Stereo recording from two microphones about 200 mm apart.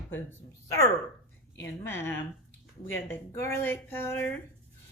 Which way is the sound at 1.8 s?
10° left (ahead or behind).